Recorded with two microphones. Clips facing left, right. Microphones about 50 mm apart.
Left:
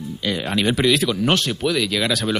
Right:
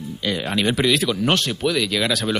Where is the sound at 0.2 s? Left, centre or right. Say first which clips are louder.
Even; centre.